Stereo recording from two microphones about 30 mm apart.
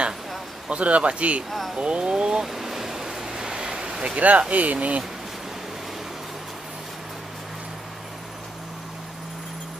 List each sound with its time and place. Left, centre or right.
0.7 s speech: right
2.4 s a sound: centre; by 4.1 s right
4.1 s speech: right